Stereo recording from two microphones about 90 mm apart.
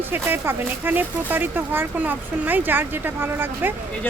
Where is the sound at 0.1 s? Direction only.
25° right (ahead or behind).